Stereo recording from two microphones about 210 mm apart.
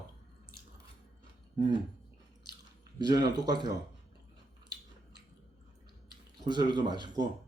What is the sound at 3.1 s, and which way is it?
Speech, 20° right (ahead or behind).